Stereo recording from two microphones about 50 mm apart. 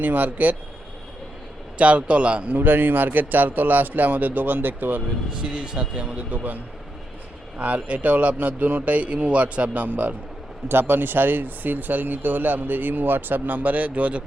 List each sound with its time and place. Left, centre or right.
0.0 s speech: right
1.8 s speech: right
2.6 s speech: right
5.3 s speech: centre
6.3 s speech: right
7.6 s speech: right
10.7 s speech: right